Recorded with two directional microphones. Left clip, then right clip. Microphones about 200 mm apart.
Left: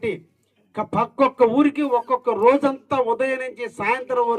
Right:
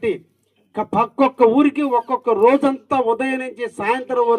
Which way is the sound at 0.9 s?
50° right (ahead or behind).